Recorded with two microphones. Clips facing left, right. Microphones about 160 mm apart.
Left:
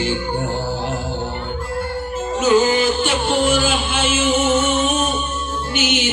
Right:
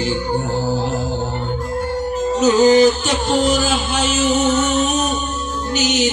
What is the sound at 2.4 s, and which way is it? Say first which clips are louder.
Music: right 4 dB; 35° right (ahead or behind).